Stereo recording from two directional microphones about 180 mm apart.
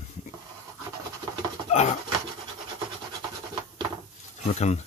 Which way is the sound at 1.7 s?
35° left (ahead or behind).